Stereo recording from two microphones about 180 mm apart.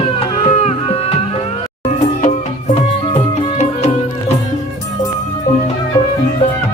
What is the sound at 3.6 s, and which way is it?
Music, 35° left (ahead or behind).